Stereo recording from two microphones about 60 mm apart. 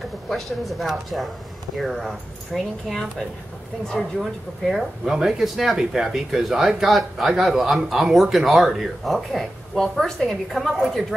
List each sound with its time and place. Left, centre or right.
0.3 s speech: centre